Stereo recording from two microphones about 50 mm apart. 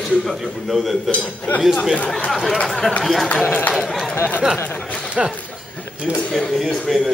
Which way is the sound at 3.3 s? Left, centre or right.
Left.